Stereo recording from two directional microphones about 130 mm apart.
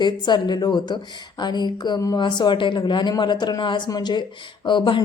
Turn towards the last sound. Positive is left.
turn(degrees=40)  # may be behind; listen again after turning